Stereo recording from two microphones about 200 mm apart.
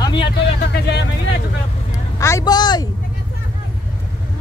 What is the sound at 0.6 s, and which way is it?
Speech, 55° left (ahead or behind).